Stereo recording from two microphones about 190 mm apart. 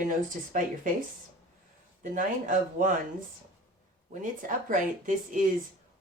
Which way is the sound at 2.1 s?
45° right (ahead or behind).